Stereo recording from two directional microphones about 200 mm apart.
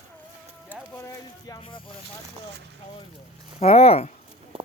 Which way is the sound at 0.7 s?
10° left (ahead or behind).